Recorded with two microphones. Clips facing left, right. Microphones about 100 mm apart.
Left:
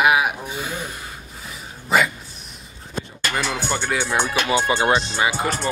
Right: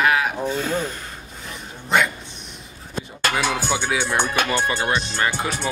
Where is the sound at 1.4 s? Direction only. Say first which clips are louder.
Left 1 dB; centre (ahead or behind).